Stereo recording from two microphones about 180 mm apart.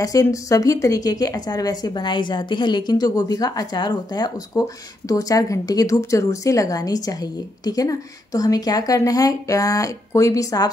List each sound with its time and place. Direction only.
0.0 s a woman's voice: 20° left (ahead or behind)